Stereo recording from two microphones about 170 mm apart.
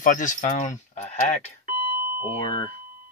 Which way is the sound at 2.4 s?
30° left (ahead or behind).